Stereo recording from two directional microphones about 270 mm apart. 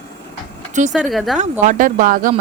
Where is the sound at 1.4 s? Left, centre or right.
Right.